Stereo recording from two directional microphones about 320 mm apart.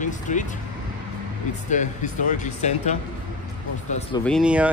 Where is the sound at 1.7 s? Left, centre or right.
Left.